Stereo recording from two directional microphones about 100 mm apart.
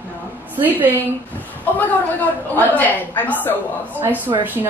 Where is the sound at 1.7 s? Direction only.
15° left (ahead or behind).